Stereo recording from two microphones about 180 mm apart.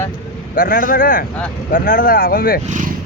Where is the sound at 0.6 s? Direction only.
50° left (ahead or behind).